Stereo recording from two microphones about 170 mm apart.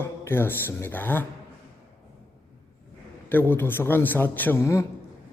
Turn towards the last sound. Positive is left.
turn(degrees=15)  # may be behind; listen again after turning